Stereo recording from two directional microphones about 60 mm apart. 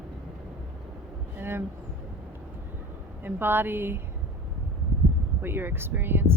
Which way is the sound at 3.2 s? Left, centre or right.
Right.